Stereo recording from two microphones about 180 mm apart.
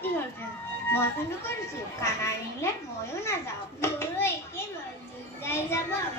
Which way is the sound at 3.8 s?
15° left (ahead or behind).